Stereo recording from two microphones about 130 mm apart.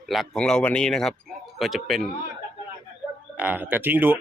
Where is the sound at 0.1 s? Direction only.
Centre (ahead or behind).